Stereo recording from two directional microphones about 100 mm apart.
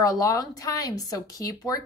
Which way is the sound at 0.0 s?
35° left (ahead or behind).